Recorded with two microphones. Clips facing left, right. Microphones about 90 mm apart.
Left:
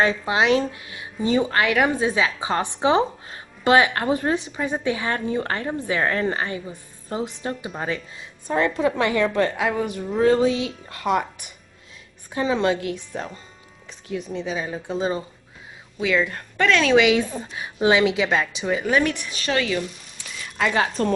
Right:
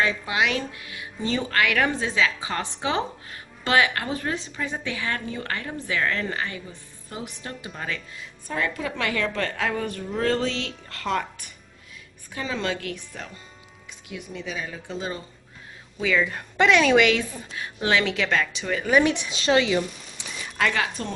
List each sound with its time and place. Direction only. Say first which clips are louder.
0.0 s a woman's voice: left 4 dB; 30° left (ahead or behind)
16.0 s speech: left 2 dB; 5° left (ahead or behind)
16.5 s a woman's voice: right 1 dB; 15° right (ahead or behind)
16.8 s speech: left 2 dB; centre (ahead or behind)
17.3 s a woman's voice: left 6 dB; 30° left (ahead or behind)
17.6 s speech: left 5 dB; 20° left (ahead or behind)
19.0 s a woman's voice: right 3 dB; 20° right (ahead or behind)
20.7 s a woman's voice: left 5 dB; 35° left (ahead or behind)